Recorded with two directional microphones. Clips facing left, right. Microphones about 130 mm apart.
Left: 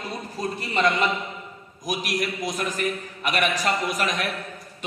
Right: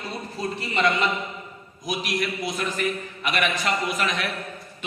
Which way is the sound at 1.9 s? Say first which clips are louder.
Even; 45° left (ahead or behind).